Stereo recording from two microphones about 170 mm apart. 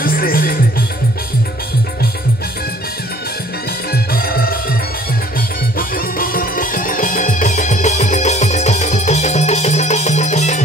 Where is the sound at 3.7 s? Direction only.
65° left (ahead or behind).